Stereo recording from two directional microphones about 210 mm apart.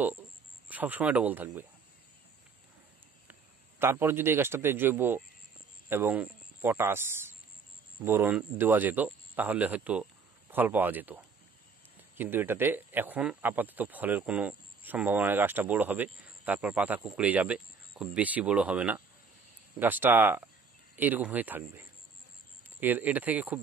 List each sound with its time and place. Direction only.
0.7 s speech: 10° right (ahead or behind)
3.8 s speech: 10° right (ahead or behind)